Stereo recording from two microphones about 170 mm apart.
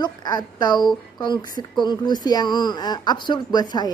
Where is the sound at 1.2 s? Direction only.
25° left (ahead or behind).